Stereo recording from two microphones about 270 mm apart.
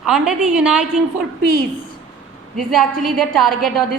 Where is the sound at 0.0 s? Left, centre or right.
Centre.